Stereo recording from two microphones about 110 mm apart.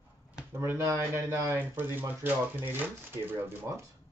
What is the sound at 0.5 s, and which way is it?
Speech, 25° right (ahead or behind).